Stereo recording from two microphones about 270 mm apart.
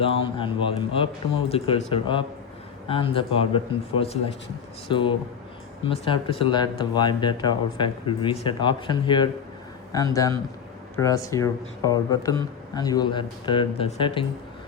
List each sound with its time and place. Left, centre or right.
0.0 s a man's voice: centre